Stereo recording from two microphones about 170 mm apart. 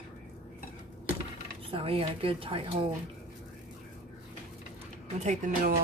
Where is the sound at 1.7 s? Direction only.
35° right (ahead or behind).